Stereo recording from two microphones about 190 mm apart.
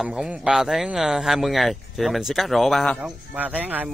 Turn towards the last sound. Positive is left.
turn(degrees=-10)  # may be behind; listen again after turning